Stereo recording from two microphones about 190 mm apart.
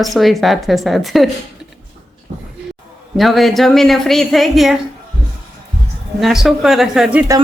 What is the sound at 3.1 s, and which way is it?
Speech, centre (ahead or behind).